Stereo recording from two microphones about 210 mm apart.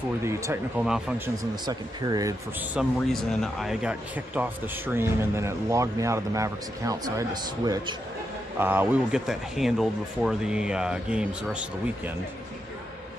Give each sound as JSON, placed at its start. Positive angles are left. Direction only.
{"t": 0.3, "sound": "speech", "side_deg": -15}
{"t": 1.6, "sound": "speech", "side_deg": -20}
{"t": 2.7, "sound": "speech", "side_deg": 0}